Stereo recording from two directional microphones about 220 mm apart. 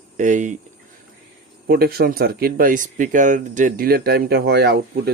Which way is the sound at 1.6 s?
45° right (ahead or behind).